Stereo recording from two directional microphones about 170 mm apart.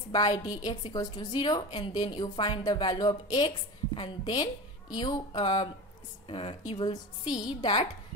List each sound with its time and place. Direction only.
0.1 s a woman's voice: 25° left (ahead or behind)
6.9 s a woman's voice: 20° left (ahead or behind)